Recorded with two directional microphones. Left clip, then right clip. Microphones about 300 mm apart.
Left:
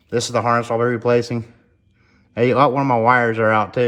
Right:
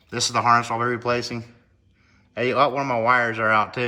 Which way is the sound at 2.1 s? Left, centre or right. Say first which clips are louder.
Left 6 dB; centre.